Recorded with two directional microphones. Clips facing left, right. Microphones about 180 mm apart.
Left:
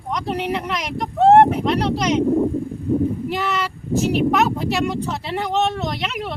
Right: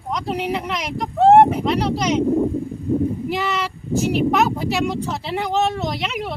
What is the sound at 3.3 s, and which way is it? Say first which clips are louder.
Speech: even; centre (ahead or behind).